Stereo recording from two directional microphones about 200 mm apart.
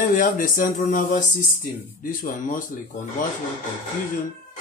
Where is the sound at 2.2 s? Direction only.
40° left (ahead or behind).